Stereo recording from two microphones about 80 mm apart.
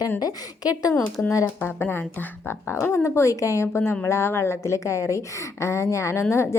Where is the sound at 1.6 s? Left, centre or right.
Left.